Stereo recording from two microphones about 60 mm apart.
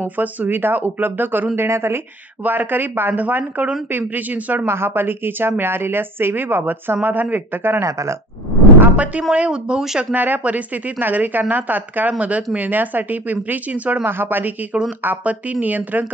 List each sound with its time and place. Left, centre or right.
0.0 s a woman's voice: right
2.4 s a woman's voice: right
4.6 s a woman's voice: right
7.8 s speech: right
8.7 s a sound: right
9.3 s speech: centre
10.1 s a woman's voice: right
14.0 s a woman's voice: right
15.0 s a woman's voice: right